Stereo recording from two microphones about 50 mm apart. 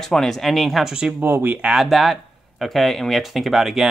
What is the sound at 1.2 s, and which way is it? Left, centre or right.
Speech, right.